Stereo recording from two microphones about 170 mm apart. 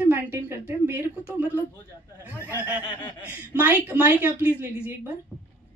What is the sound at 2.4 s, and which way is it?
Speech, 15° left (ahead or behind).